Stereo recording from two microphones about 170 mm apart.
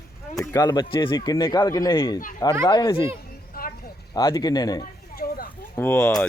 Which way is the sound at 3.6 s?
65° left (ahead or behind).